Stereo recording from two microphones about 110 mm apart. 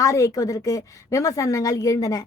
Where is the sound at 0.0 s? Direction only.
30° left (ahead or behind).